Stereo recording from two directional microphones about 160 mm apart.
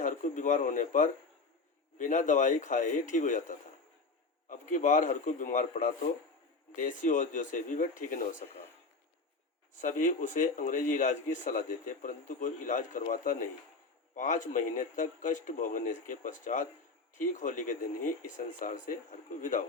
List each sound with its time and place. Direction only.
0.0 s a sound: 50° left (ahead or behind)
2.0 s a man's voice: 55° left (ahead or behind)
9.7 s a man's voice: 50° left (ahead or behind)